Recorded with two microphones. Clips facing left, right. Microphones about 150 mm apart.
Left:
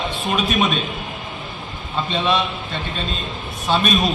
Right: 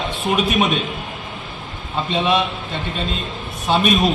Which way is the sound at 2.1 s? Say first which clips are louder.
Right 2 dB; 20° right (ahead or behind).